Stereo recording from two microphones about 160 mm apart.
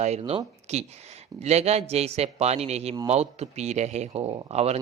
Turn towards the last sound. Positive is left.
turn(degrees=-40)  # may be behind; listen again after turning